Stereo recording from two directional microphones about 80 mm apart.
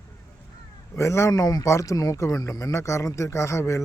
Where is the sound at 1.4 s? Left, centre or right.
Left.